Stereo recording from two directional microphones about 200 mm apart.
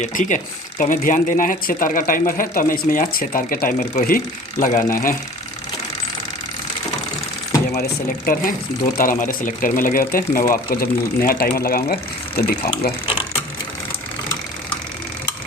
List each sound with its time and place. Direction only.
0.0 s speech: 40° left (ahead or behind)
7.8 s speech: 45° left (ahead or behind)